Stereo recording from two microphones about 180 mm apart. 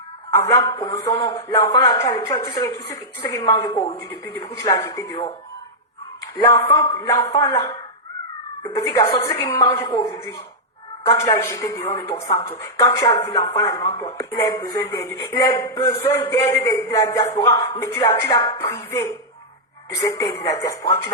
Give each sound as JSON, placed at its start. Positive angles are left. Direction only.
{"t": 0.3, "sound": "speech", "side_deg": 20}
{"t": 6.3, "sound": "a woman's voice", "side_deg": 20}